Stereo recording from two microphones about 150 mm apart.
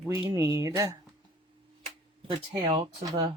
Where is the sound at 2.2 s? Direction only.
35° right (ahead or behind).